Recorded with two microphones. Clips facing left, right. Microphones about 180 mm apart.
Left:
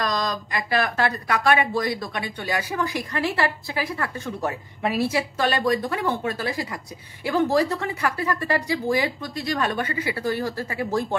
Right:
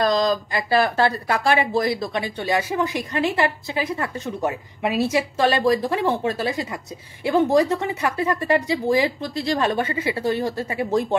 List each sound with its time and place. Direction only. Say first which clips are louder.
0.0 s speech: right 7 dB; 30° right (ahead or behind)